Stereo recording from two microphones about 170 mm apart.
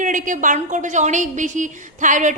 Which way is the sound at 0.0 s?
50° right (ahead or behind).